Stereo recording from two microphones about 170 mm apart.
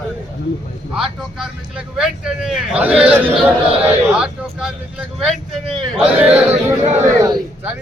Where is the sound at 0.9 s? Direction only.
5° right (ahead or behind).